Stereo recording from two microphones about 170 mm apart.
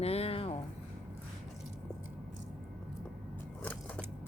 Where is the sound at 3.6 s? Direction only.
10° left (ahead or behind).